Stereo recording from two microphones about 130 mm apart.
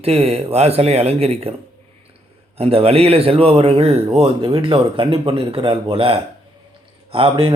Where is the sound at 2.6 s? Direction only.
50° right (ahead or behind).